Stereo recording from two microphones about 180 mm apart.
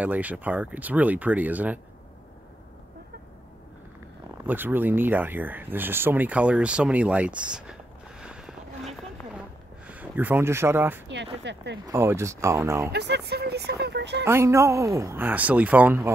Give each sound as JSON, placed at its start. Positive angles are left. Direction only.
{"t": 0.0, "sound": "speech", "side_deg": -10}
{"t": 4.5, "sound": "speech", "side_deg": -10}
{"t": 8.2, "sound": "a sound", "side_deg": -5}
{"t": 9.8, "sound": "speech", "side_deg": -10}
{"t": 11.4, "sound": "speech", "side_deg": -70}
{"t": 11.8, "sound": "speech", "side_deg": -15}
{"t": 12.9, "sound": "speech", "side_deg": -65}
{"t": 14.2, "sound": "speech", "side_deg": -15}